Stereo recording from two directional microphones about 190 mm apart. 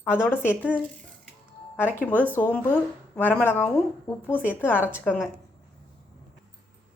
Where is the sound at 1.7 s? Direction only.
10° left (ahead or behind).